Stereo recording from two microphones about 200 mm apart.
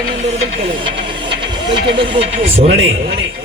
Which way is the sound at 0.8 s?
25° right (ahead or behind).